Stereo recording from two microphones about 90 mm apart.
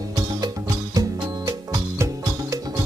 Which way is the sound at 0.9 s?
35° right (ahead or behind).